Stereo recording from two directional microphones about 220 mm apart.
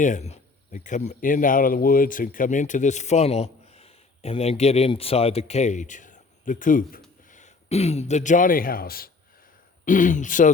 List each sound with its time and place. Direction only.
0.0 s a man's voice: 30° left (ahead or behind)